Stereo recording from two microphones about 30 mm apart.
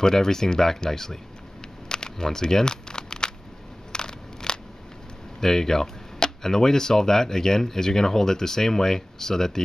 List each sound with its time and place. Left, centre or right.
0.0 s speech: centre
1.9 s a sound: left
3.9 s scissors: left
5.4 s speech: centre
6.1 s a sound: left
6.5 s speech: centre